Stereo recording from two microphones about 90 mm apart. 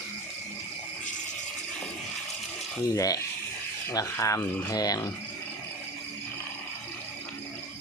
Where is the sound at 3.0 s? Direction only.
40° left (ahead or behind).